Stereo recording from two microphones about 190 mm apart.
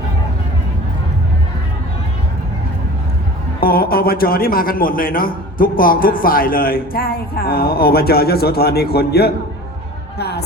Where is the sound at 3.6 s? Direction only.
50° left (ahead or behind).